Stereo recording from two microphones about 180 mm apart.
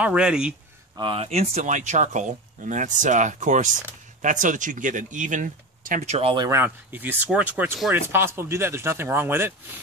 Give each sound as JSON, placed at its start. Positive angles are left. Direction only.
{"t": 0.0, "sound": "speech", "side_deg": -5}
{"t": 0.9, "sound": "speech", "side_deg": -30}
{"t": 6.4, "sound": "speech", "side_deg": -15}